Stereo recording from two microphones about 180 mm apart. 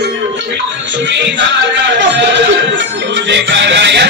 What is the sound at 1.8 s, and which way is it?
Music, 75° right (ahead or behind).